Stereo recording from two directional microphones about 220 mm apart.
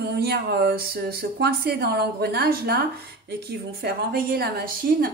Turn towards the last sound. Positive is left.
turn(degrees=-40)  # may be behind; listen again after turning